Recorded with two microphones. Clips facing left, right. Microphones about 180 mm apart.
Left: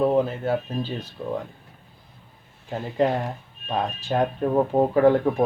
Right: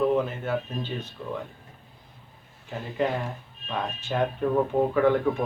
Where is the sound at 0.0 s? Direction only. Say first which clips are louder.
Left 3 dB; 35° left (ahead or behind).